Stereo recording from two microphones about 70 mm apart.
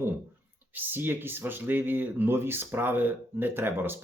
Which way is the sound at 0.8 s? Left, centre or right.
Right.